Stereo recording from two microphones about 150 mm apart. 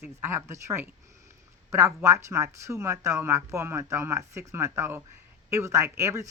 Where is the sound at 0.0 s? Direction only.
15° right (ahead or behind).